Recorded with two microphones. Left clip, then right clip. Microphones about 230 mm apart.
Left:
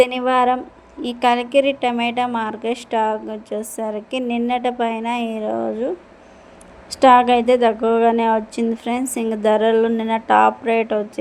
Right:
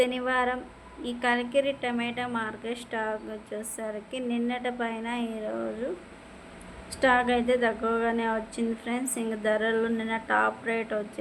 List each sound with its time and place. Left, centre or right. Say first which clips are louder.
0.0 s a woman's voice: left 10 dB; left
7.0 s a woman's voice: left 12 dB; left